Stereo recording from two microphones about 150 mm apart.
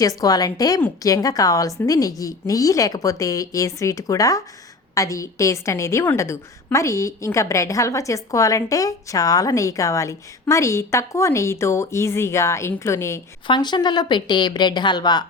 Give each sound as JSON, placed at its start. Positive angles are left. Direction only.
{"t": 0.2, "sound": "a woman's voice", "side_deg": 25}
{"t": 13.5, "sound": "a woman's voice", "side_deg": 30}